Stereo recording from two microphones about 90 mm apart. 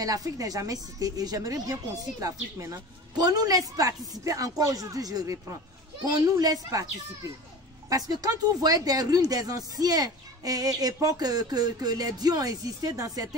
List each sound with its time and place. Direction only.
0.0 s a woman's voice: 40° right (ahead or behind)
7.9 s speech: 45° right (ahead or behind)